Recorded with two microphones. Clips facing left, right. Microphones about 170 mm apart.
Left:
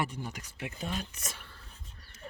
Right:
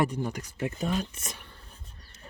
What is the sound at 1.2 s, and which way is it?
Speech, 20° right (ahead or behind).